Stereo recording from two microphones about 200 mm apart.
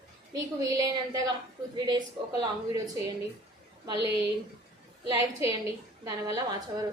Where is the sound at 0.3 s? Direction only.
15° right (ahead or behind).